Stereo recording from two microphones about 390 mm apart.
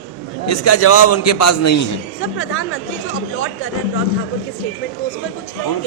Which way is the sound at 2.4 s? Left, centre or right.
Left.